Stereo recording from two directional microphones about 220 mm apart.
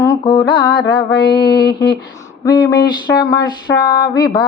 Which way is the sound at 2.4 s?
20° left (ahead or behind).